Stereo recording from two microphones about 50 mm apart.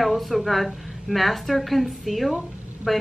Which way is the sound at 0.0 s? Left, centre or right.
Centre.